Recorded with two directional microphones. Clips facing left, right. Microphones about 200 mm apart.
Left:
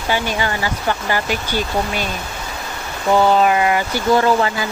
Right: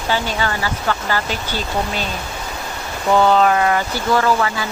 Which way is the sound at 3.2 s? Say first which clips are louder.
Even; 10° left (ahead or behind).